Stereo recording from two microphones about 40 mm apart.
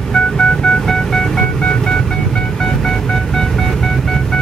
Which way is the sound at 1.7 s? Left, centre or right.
Centre.